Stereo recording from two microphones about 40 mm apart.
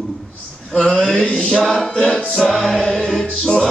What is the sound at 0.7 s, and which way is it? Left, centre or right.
Music, left.